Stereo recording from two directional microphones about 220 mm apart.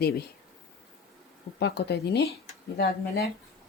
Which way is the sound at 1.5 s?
50° left (ahead or behind).